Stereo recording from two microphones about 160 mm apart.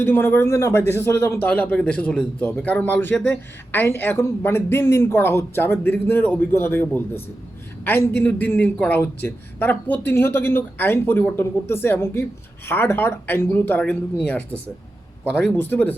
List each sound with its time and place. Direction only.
0.0 s speech: 15° left (ahead or behind)